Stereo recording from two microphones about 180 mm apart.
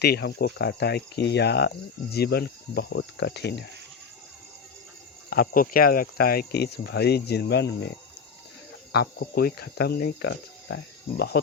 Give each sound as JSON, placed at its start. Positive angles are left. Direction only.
{"t": 0.0, "sound": "cricket", "side_deg": 65}
{"t": 5.3, "sound": "speech", "side_deg": 55}
{"t": 8.9, "sound": "speech", "side_deg": 60}